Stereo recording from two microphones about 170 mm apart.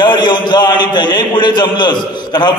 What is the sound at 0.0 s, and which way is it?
A man's voice, 25° left (ahead or behind).